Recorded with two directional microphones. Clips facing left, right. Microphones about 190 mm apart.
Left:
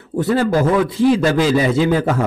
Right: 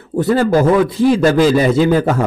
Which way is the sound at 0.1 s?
40° right (ahead or behind).